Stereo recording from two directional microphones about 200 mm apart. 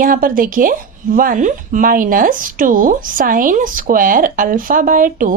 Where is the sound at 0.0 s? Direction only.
45° right (ahead or behind).